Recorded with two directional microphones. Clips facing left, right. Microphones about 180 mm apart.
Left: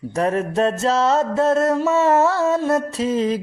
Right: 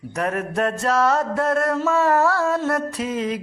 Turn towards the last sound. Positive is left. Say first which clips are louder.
# left 5 dB
turn(degrees=30)  # may be behind; listen again after turning